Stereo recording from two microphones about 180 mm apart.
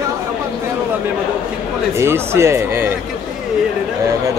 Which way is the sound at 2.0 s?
15° right (ahead or behind).